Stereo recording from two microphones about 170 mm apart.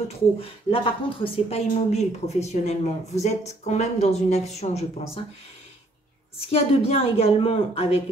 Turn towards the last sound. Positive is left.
turn(degrees=35)  # may be behind; listen again after turning